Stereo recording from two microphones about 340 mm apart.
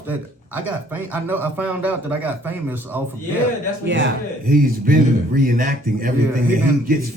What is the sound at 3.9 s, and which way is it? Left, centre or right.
A man's voice, right.